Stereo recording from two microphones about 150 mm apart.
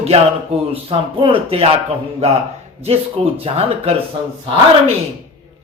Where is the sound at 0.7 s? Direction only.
35° right (ahead or behind).